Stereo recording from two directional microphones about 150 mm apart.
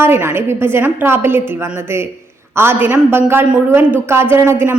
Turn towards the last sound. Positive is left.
turn(degrees=-15)  # may be behind; listen again after turning